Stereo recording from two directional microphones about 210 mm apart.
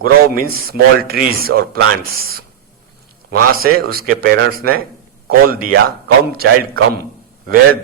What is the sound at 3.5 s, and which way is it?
A man's voice, 45° right (ahead or behind).